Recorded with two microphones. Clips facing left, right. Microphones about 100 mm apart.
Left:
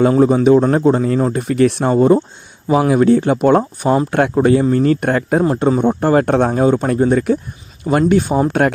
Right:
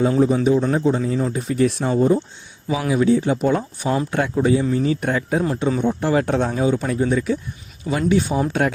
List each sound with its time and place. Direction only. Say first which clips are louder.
0.2 s speech: left 6 dB; 65° left (ahead or behind)
2.6 s speech: left 6 dB; 50° left (ahead or behind)
3.6 s speech: left 7 dB; 50° left (ahead or behind)
4.1 s speech: left 4 dB; 60° left (ahead or behind)